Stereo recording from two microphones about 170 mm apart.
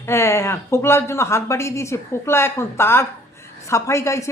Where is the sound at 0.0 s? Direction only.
15° left (ahead or behind).